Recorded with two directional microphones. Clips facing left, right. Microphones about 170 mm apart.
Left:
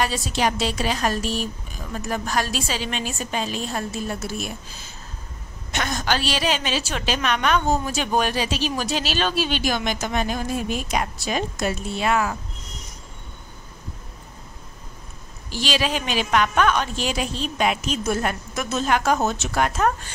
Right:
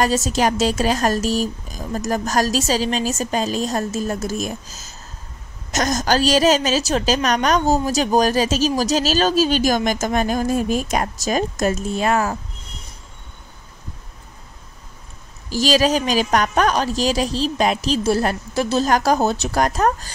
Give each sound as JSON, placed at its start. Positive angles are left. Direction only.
{"t": 0.0, "sound": "a woman's voice", "side_deg": -45}
{"t": 15.5, "sound": "a woman's voice", "side_deg": -40}